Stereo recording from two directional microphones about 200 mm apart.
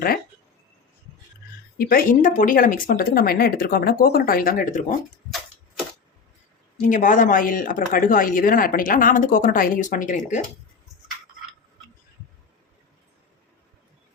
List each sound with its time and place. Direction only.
1.8 s speech: 45° left (ahead or behind)
6.8 s speech: 40° left (ahead or behind)